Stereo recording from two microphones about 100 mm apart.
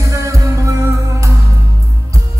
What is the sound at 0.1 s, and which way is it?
Music, 30° right (ahead or behind).